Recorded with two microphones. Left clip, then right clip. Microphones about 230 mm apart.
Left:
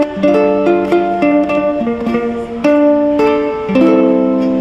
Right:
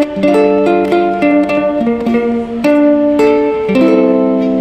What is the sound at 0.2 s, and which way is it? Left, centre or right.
Music, right.